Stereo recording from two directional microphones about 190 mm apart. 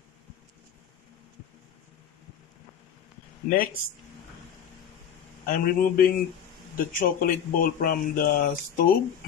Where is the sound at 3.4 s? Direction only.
50° left (ahead or behind).